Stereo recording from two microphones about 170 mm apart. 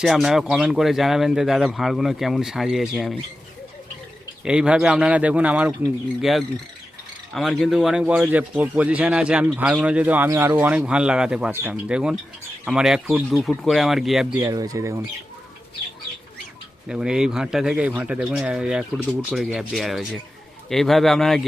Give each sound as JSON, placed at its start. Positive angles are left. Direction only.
{"t": 0.0, "sound": "speech", "side_deg": 0}
{"t": 4.4, "sound": "speech", "side_deg": -5}
{"t": 14.4, "sound": "speech", "side_deg": -20}
{"t": 16.9, "sound": "speech", "side_deg": -5}